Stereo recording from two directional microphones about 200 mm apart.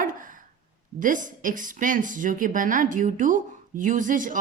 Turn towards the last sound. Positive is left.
turn(degrees=-40)  # may be behind; listen again after turning